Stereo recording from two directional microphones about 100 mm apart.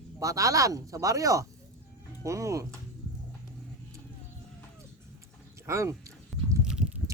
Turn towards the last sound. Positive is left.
turn(degrees=-5)  # may be behind; listen again after turning